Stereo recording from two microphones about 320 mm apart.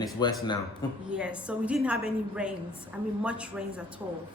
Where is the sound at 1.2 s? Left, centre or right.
Centre.